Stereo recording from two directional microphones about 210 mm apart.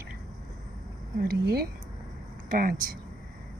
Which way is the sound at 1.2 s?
50° right (ahead or behind).